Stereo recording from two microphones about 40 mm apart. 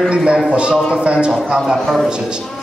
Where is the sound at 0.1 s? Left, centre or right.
Right.